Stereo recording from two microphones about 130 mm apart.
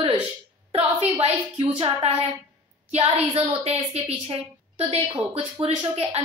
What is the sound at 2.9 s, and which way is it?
A woman's voice, 50° right (ahead or behind).